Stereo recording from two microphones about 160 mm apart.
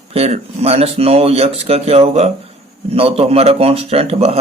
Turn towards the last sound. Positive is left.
turn(degrees=-40)  # may be behind; listen again after turning